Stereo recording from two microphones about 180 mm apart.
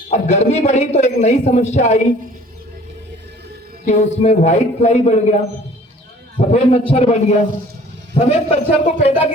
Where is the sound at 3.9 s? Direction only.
40° left (ahead or behind).